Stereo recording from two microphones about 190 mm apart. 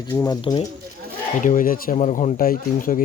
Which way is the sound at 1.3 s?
45° left (ahead or behind).